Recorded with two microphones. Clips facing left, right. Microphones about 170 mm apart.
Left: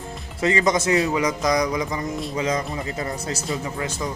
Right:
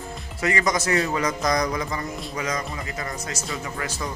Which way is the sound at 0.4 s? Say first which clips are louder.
Left 3 dB; 25° left (ahead or behind).